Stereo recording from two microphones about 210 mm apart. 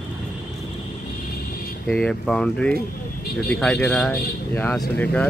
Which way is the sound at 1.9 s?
5° left (ahead or behind).